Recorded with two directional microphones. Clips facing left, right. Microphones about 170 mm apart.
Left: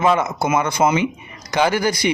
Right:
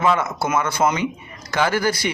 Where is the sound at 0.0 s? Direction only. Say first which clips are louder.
Left 2 dB; 20° left (ahead or behind).